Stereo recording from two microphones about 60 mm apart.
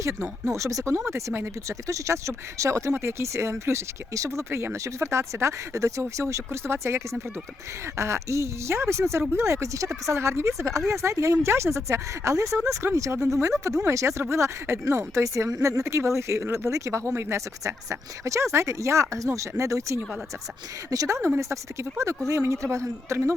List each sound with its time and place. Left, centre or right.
0.0 s a woman's voice: right
0.9 s speech: right
1.9 s a woman's voice: right
2.9 s a woman's voice: right
21.1 s a woman's voice: right